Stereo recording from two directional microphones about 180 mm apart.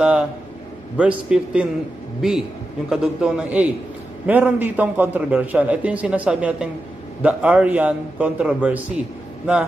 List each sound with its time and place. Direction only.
0.0 s a sound: 5° right (ahead or behind)
0.9 s a man's voice: 5° right (ahead or behind)
2.9 s a man's voice: 5° right (ahead or behind)